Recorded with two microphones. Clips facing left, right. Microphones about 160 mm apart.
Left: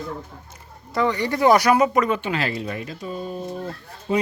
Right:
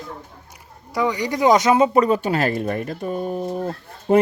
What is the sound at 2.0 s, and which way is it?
Speech, 35° right (ahead or behind).